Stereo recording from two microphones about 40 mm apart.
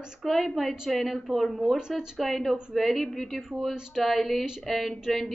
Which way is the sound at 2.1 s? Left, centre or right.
Centre.